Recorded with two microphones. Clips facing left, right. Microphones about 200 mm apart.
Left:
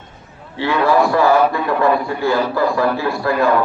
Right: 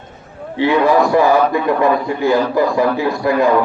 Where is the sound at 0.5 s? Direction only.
15° right (ahead or behind).